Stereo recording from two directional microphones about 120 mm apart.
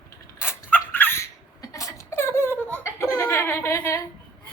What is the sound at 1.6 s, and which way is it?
Laughter, 25° left (ahead or behind).